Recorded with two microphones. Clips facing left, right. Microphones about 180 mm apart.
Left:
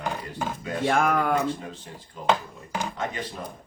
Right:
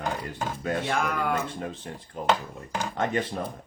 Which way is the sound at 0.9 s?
50° left (ahead or behind).